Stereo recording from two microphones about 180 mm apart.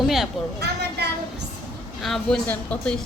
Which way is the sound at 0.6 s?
65° right (ahead or behind).